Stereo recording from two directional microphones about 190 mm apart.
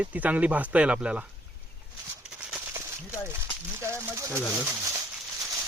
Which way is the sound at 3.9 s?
15° right (ahead or behind).